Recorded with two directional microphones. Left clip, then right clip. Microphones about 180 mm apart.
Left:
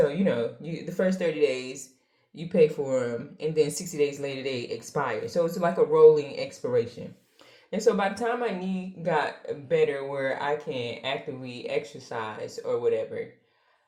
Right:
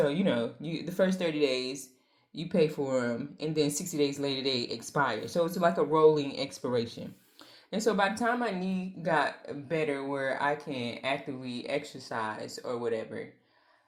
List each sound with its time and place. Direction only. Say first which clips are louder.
0.0 s speech: left 4 dB; 25° right (ahead or behind)